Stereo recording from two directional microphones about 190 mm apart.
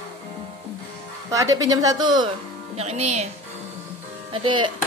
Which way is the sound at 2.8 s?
35° right (ahead or behind).